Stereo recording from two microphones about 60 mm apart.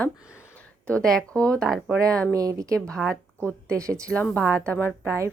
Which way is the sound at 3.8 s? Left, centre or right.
Right.